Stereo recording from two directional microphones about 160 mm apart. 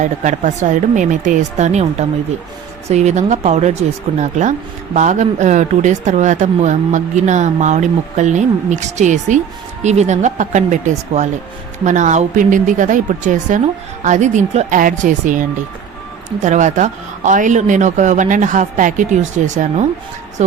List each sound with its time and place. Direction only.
0.0 s a woman's voice: 50° right (ahead or behind)